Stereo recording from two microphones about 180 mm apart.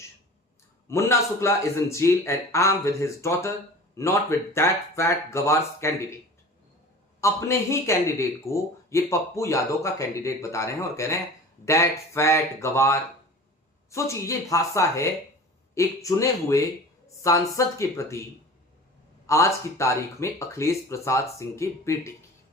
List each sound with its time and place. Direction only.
0.9 s a man's voice: 15° left (ahead or behind)
7.2 s a man's voice: 15° left (ahead or behind)
19.3 s a man's voice: 15° left (ahead or behind)